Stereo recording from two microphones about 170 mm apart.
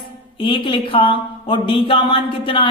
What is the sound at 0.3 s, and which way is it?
A man's voice, 30° left (ahead or behind).